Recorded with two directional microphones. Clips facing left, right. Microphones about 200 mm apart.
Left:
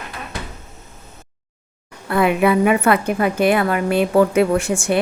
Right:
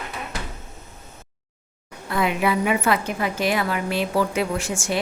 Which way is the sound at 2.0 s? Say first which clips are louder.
Left 6 dB; 60° left (ahead or behind).